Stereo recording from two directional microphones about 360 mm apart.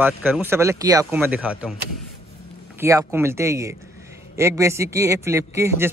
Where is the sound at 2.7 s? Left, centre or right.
Centre.